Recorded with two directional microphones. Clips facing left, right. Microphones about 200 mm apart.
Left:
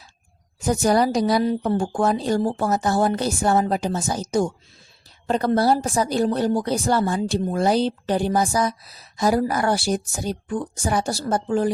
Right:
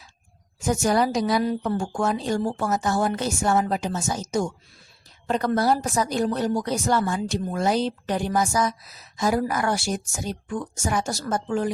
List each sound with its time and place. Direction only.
0.6 s a woman's voice: 35° left (ahead or behind)